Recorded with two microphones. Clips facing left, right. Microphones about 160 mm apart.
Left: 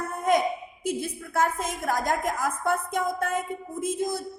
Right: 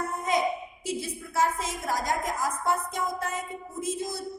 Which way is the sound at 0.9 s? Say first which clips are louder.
Left 4 dB; 55° left (ahead or behind).